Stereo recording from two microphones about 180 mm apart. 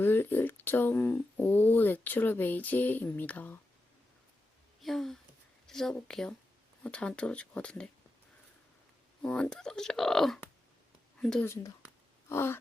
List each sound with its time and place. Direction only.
0.0 s speech: 10° left (ahead or behind)
4.8 s speech: centre (ahead or behind)
9.2 s speech: 5° left (ahead or behind)
11.4 s speech: 15° left (ahead or behind)